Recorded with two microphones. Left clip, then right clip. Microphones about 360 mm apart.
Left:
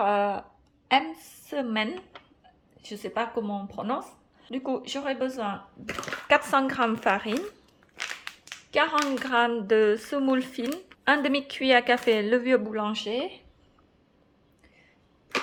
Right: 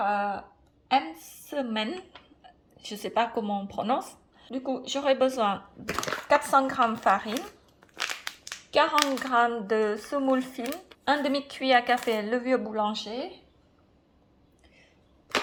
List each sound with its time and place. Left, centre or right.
0.0 s speech: centre
0.9 s a woman's voice: left
1.5 s a woman's voice: centre
7.8 s crushing: centre
8.7 s a woman's voice: centre